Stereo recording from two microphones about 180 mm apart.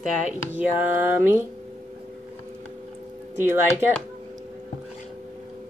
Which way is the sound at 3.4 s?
10° right (ahead or behind).